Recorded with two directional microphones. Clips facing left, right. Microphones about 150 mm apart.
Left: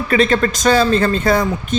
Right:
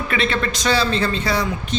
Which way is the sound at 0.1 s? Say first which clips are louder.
Left 8 dB; 40° left (ahead or behind).